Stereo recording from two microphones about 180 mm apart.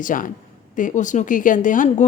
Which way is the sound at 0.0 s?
50° left (ahead or behind).